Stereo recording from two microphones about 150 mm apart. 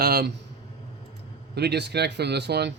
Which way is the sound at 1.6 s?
90° right.